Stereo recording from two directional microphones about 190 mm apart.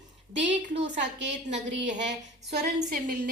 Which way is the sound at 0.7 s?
40° right (ahead or behind).